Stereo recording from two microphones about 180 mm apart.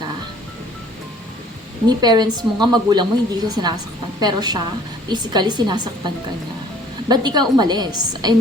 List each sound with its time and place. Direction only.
1.9 s a woman's voice: 25° right (ahead or behind)
7.1 s a woman's voice: 25° right (ahead or behind)